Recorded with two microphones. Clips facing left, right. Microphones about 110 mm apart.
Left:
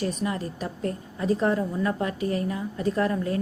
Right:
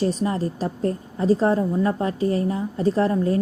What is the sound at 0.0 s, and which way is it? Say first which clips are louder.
A woman's voice: right 6 dB; 30° right (ahead or behind).